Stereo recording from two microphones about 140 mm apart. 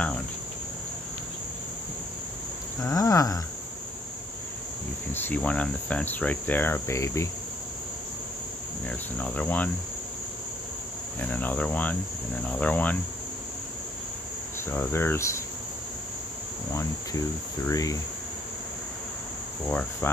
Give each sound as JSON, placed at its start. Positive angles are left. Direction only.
{"t": 2.8, "sound": "cricket", "side_deg": 20}
{"t": 5.1, "sound": "cricket", "side_deg": 15}
{"t": 8.8, "sound": "cricket", "side_deg": 10}
{"t": 11.1, "sound": "cricket", "side_deg": 10}
{"t": 14.7, "sound": "cricket", "side_deg": 15}
{"t": 17.6, "sound": "cricket", "side_deg": 25}
{"t": 19.7, "sound": "cricket", "side_deg": 10}